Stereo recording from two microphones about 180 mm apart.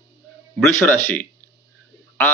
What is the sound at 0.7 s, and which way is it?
Speech, 15° left (ahead or behind).